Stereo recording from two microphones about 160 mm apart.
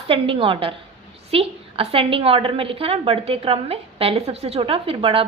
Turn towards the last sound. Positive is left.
turn(degrees=-35)  # may be behind; listen again after turning